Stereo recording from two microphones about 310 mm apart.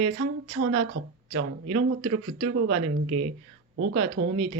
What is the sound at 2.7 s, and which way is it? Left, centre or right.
Speech, centre.